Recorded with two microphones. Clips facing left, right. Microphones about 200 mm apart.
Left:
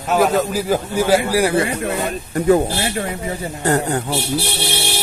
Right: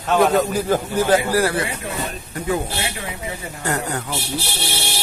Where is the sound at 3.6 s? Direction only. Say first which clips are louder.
Left 6 dB; 30° left (ahead or behind).